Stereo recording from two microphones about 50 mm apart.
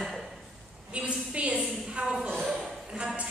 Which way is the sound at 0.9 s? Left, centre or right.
Right.